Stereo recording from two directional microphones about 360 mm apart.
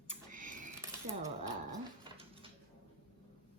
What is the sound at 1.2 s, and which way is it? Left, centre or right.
Dog, centre.